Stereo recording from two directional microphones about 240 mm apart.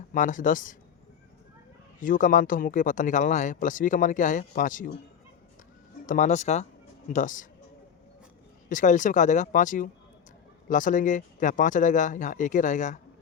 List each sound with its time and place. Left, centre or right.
0.1 s speech: left
2.0 s speech: left
6.1 s speech: left
8.7 s speech: left